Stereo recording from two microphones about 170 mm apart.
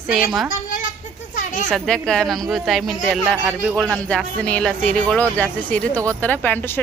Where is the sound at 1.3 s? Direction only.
50° left (ahead or behind).